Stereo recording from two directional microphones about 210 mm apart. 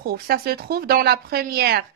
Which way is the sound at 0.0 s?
45° right (ahead or behind).